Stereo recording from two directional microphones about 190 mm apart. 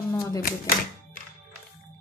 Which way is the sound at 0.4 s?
50° left (ahead or behind).